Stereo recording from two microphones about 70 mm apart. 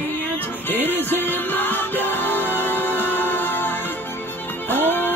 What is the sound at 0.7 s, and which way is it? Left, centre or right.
Music, left.